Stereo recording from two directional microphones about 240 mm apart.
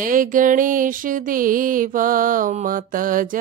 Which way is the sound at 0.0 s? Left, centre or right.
Right.